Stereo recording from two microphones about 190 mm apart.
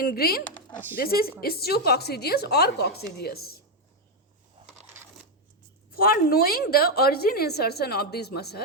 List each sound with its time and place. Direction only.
0.0 s a woman's voice: 55° left (ahead or behind)
5.9 s a woman's voice: 50° left (ahead or behind)